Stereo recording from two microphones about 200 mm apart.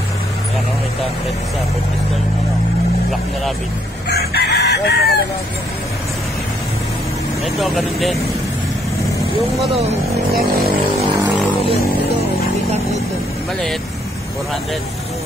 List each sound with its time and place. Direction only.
4.1 s chicken: 50° left (ahead or behind)
7.5 s speech: centre (ahead or behind)